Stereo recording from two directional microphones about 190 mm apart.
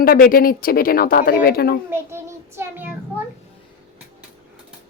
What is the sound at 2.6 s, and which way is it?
Child singing, 10° right (ahead or behind).